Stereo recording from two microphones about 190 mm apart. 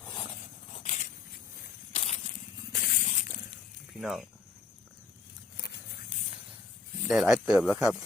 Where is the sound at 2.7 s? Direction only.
55° left (ahead or behind).